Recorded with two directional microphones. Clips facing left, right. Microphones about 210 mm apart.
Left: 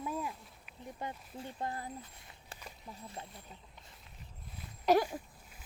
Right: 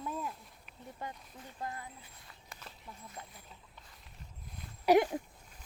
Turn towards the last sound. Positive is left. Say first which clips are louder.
# right 2 dB
turn(degrees=-15)  # may be behind; listen again after turning